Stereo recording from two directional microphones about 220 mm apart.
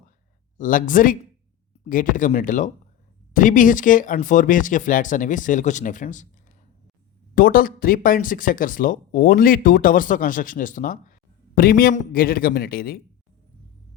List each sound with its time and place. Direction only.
0.6 s speech: 40° left (ahead or behind)
7.3 s speech: 40° left (ahead or behind)